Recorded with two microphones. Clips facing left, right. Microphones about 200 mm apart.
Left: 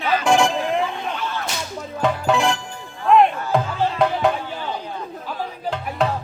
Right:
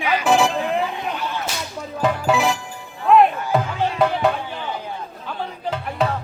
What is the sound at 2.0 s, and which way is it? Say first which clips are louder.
Music: even; 5° right (ahead or behind).